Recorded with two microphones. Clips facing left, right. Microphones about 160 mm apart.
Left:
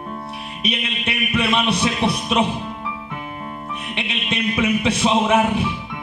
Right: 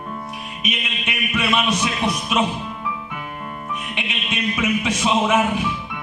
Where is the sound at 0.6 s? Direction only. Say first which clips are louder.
Left 4 dB; 35° left (ahead or behind).